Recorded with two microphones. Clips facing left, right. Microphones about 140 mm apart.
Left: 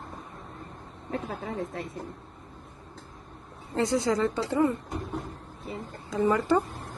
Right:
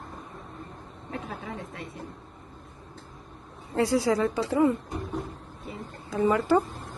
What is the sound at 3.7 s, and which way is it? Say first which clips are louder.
Speech: right 2 dB; 5° right (ahead or behind).